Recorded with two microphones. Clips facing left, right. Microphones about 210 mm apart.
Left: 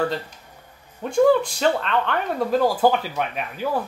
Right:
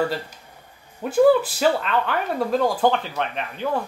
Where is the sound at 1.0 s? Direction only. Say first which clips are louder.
Right 1 dB; 5° right (ahead or behind).